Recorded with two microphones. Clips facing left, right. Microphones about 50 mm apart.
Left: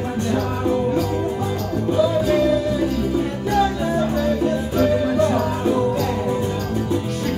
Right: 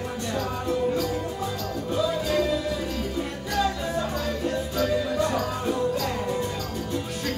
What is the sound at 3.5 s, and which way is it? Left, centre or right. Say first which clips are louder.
Music: left 7 dB; left.